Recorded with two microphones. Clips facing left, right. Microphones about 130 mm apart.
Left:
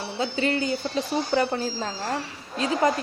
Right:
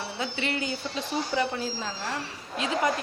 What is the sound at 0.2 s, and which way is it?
Speech, 35° left (ahead or behind).